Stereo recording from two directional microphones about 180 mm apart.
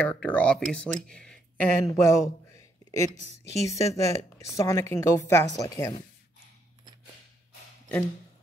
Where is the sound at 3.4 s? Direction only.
15° left (ahead or behind).